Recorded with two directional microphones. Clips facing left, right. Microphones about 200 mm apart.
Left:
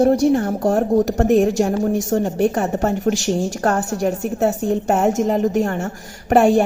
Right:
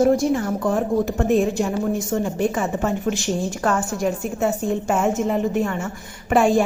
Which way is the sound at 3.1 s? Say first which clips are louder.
Left 7 dB; 50° left (ahead or behind).